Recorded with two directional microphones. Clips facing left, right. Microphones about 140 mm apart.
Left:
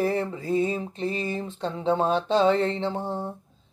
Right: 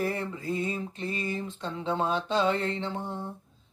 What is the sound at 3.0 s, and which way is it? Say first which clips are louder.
Speech: left 6 dB; 50° left (ahead or behind).